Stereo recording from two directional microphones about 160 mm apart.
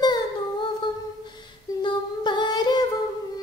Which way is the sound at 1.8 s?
30° left (ahead or behind).